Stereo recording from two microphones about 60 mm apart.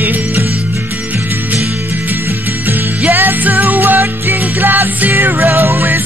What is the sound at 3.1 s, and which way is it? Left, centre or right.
Music, right.